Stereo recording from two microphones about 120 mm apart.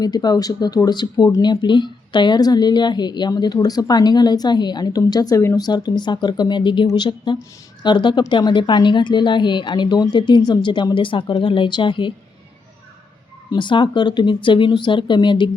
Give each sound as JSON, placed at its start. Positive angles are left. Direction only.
{"t": 0.0, "sound": "speech", "side_deg": 35}
{"t": 13.5, "sound": "speech", "side_deg": 40}